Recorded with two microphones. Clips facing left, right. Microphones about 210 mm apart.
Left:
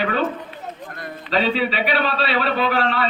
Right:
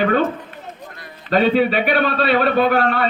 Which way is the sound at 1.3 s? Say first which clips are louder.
Right 5 dB; 50° right (ahead or behind).